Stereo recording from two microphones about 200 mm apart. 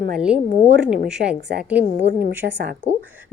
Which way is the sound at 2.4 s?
55° right (ahead or behind).